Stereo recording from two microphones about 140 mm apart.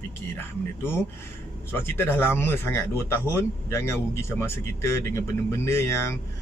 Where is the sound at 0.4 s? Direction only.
15° left (ahead or behind).